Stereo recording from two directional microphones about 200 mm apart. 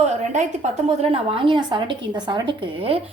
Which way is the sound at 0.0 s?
35° right (ahead or behind).